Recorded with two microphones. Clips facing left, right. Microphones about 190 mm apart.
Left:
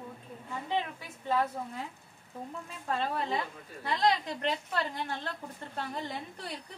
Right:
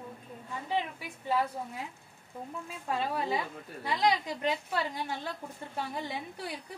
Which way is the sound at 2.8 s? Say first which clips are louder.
Even; 10° right (ahead or behind).